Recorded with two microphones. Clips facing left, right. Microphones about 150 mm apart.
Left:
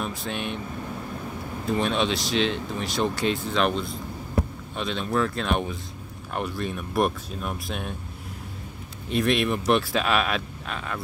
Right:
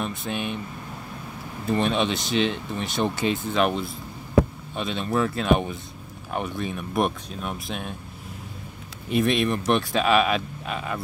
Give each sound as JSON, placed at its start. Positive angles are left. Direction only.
{"t": 0.0, "sound": "speech", "side_deg": 0}
{"t": 1.7, "sound": "speech", "side_deg": 0}
{"t": 4.4, "sound": "a sound", "side_deg": -90}
{"t": 4.7, "sound": "speech", "side_deg": 0}
{"t": 9.1, "sound": "speech", "side_deg": 0}